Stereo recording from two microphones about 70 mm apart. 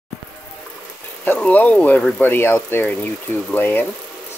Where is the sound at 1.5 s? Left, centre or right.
Left.